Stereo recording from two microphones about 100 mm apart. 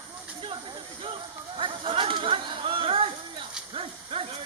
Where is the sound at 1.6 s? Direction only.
60° right (ahead or behind).